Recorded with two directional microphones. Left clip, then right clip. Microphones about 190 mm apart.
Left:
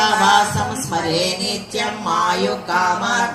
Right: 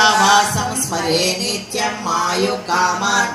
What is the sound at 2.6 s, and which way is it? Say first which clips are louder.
Music: even; 50° right (ahead or behind).